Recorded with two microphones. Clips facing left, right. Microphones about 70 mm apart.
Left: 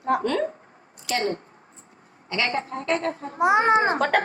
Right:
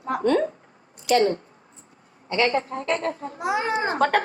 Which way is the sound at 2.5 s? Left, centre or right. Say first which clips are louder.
Right 1 dB; left.